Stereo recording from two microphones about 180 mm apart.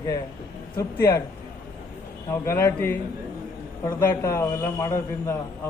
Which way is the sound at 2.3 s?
15° left (ahead or behind).